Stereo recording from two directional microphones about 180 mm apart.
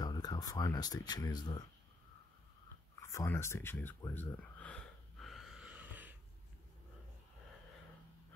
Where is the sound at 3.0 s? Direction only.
15° left (ahead or behind); by 6.1 s 10° right (ahead or behind).